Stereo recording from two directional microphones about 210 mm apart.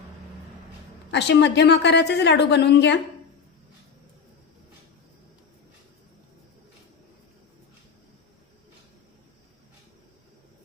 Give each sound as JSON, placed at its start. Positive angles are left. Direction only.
{"t": 1.1, "sound": "a woman's voice", "side_deg": 55}